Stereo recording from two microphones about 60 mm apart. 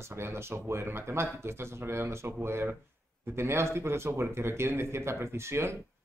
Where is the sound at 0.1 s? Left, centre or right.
Right.